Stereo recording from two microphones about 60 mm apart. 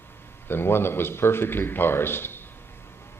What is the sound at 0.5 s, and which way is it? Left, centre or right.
A man's voice, left.